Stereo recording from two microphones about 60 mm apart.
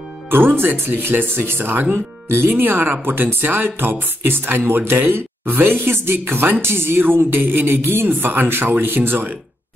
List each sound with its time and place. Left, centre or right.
0.3 s speech: right